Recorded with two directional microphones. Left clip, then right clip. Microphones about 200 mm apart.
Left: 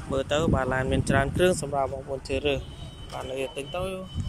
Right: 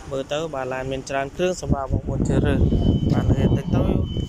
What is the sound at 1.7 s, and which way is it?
Speech, 15° left (ahead or behind).